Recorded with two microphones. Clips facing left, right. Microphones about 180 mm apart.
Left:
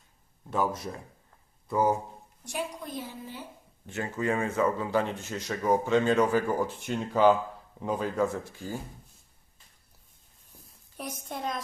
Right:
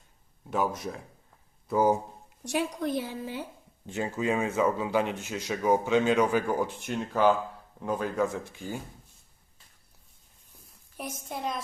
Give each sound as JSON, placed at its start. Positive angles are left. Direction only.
{"t": 0.5, "sound": "speech", "side_deg": 0}
{"t": 2.4, "sound": "a woman's voice", "side_deg": -80}
{"t": 3.8, "sound": "a man's voice", "side_deg": -15}
{"t": 11.3, "sound": "speech", "side_deg": 0}